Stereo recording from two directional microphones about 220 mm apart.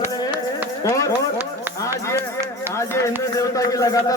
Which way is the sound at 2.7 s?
15° left (ahead or behind).